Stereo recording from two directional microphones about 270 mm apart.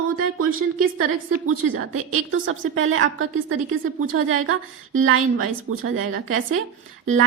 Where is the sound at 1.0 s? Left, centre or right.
Right.